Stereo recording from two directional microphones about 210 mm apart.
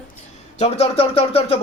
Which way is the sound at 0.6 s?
25° left (ahead or behind).